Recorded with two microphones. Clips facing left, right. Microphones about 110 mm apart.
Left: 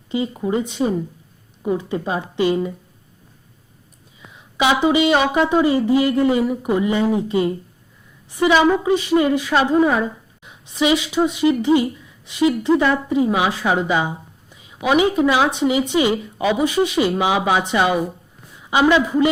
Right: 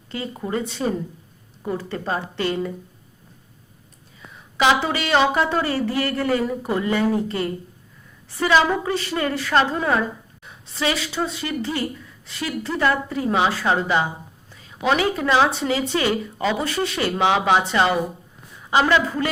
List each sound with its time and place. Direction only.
0.1 s speech: 15° left (ahead or behind)
4.7 s speech: 15° left (ahead or behind)